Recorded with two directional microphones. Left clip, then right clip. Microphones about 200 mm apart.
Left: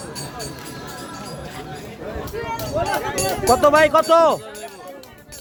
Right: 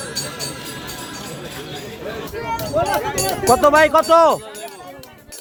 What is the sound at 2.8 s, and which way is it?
Speech, 40° right (ahead or behind).